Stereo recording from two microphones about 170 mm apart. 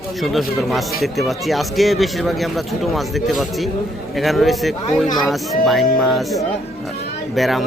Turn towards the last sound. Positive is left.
turn(degrees=0)  # may be behind; listen again after turning